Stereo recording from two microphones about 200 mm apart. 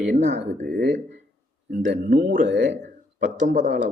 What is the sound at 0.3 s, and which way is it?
Speech, 60° right (ahead or behind).